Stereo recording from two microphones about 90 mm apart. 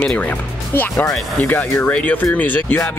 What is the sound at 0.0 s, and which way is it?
A woman's voice, 15° left (ahead or behind).